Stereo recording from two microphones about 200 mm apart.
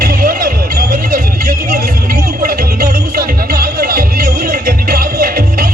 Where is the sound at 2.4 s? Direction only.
50° right (ahead or behind).